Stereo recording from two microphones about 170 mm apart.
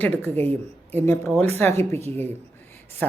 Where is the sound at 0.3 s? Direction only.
35° right (ahead or behind).